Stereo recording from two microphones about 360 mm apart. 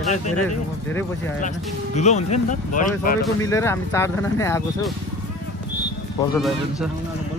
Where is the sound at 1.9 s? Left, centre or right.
Centre.